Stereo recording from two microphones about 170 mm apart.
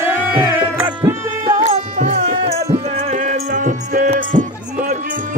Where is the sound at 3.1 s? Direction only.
45° right (ahead or behind).